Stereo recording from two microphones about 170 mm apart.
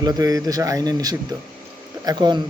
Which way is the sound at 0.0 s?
20° right (ahead or behind).